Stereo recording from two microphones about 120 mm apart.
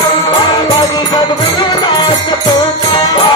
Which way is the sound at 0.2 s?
35° left (ahead or behind).